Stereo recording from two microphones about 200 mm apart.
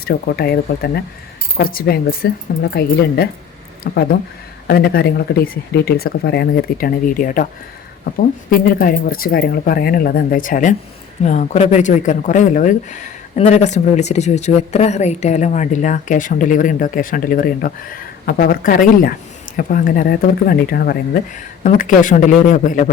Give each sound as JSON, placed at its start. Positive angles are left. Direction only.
{"t": 0.0, "sound": "speech", "side_deg": 50}